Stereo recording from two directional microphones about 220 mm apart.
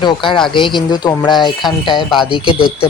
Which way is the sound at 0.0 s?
20° left (ahead or behind).